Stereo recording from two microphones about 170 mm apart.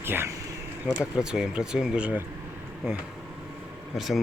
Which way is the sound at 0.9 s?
10° right (ahead or behind).